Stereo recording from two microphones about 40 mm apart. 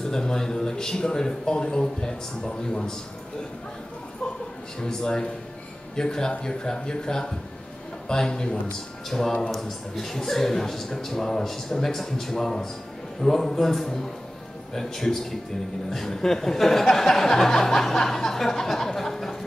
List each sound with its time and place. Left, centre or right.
0.0 s speech: centre
4.7 s speech: centre